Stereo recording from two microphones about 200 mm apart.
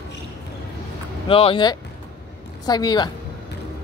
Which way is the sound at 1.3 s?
25° left (ahead or behind).